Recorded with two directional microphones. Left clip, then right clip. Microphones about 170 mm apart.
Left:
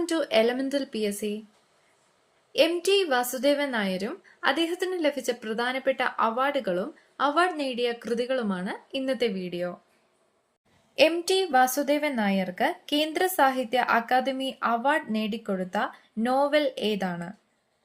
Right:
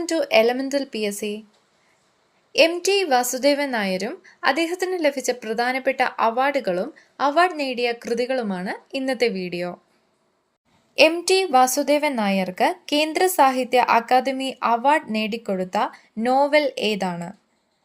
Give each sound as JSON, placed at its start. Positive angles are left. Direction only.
{"t": 0.0, "sound": "a woman's voice", "side_deg": -10}
{"t": 2.5, "sound": "a woman's voice", "side_deg": -15}
{"t": 10.9, "sound": "a woman's voice", "side_deg": -20}